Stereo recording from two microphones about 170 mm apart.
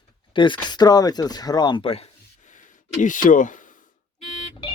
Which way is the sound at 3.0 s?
50° left (ahead or behind).